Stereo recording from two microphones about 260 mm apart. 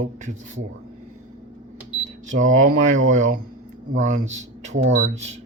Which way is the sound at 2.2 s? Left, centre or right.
Right.